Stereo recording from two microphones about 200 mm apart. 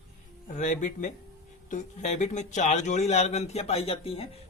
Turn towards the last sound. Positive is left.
turn(degrees=30)  # may be behind; listen again after turning